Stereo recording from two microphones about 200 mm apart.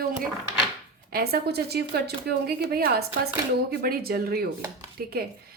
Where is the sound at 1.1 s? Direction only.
50° right (ahead or behind).